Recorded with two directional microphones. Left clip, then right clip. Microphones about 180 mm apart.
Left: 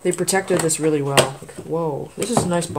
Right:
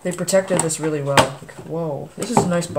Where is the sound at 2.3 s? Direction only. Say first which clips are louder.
Right 2 dB; 40° left (ahead or behind).